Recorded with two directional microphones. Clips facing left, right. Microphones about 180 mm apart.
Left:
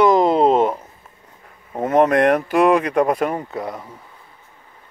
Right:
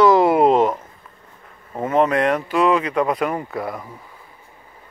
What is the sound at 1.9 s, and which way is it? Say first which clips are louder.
Speech: left 3 dB; 45° left (ahead or behind).